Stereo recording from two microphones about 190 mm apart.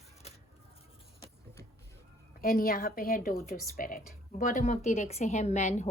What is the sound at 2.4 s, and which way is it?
Speech, 50° left (ahead or behind).